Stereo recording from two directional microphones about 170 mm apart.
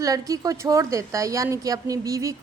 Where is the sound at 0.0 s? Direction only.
20° right (ahead or behind).